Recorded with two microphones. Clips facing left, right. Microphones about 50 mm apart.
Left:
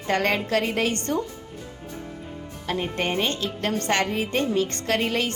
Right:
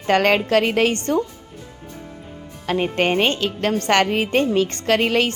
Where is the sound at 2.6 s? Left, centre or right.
Right.